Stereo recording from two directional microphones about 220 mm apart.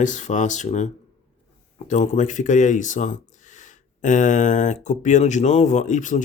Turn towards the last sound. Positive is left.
turn(degrees=35)  # may be behind; listen again after turning